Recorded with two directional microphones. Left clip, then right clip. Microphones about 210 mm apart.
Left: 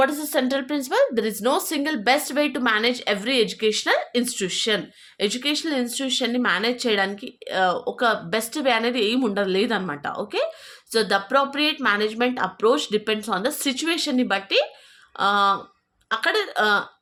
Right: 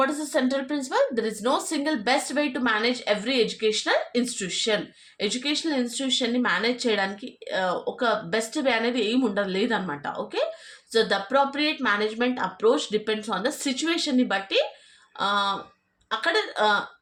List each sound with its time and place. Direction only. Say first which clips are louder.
0.0 s speech: left 3 dB; 40° left (ahead or behind)